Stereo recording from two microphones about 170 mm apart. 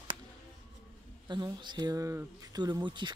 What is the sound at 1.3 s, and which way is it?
Speech, 25° right (ahead or behind).